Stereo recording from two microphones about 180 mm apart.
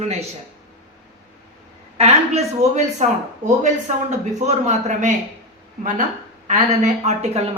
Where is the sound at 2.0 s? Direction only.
35° right (ahead or behind).